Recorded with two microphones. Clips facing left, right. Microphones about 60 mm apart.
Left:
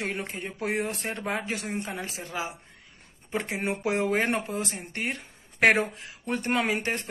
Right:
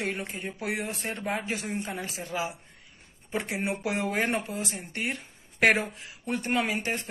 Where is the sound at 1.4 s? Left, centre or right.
Left.